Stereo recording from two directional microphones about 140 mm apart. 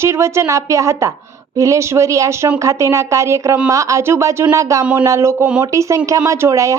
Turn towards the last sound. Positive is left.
turn(degrees=-20)  # may be behind; listen again after turning